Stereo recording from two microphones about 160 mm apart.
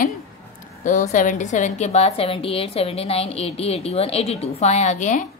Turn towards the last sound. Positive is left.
turn(degrees=50)  # may be behind; listen again after turning